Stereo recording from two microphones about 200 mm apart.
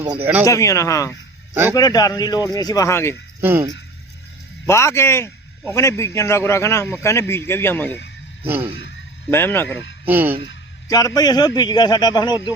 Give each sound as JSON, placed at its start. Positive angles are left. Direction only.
{"t": 0.0, "sound": "speech", "side_deg": -10}
{"t": 0.4, "sound": "a man's voice", "side_deg": 15}
{"t": 4.6, "sound": "a man's voice", "side_deg": 15}
{"t": 8.4, "sound": "speech", "side_deg": -10}
{"t": 9.3, "sound": "a man's voice", "side_deg": 10}
{"t": 10.1, "sound": "speech", "side_deg": -10}
{"t": 10.8, "sound": "a man's voice", "side_deg": 20}